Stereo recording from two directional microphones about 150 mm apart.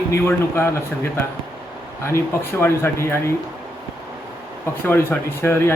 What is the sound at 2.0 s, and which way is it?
Speech, 15° left (ahead or behind).